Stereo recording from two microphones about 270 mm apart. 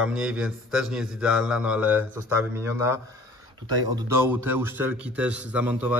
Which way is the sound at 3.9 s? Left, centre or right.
Centre.